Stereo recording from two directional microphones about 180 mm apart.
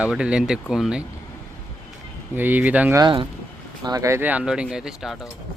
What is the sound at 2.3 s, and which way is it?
Speech, 10° right (ahead or behind).